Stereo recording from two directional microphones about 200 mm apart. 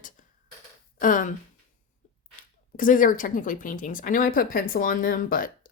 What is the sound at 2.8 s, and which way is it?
Speech, 40° left (ahead or behind).